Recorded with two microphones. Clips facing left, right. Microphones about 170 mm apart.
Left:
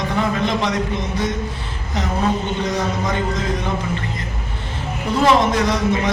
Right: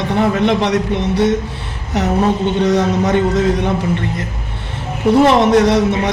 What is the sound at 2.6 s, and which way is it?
Speech, 70° right (ahead or behind).